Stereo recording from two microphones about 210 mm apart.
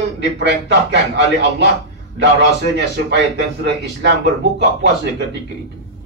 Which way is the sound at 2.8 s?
55° right (ahead or behind).